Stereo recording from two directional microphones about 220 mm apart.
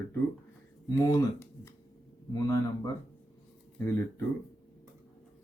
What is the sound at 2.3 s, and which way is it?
Speech, 15° left (ahead or behind).